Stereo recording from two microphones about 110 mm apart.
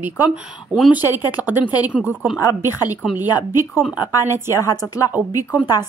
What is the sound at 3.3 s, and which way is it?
A woman's voice, 40° left (ahead or behind).